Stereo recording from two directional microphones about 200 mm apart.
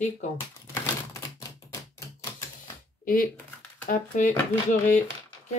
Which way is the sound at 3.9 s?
40° left (ahead or behind).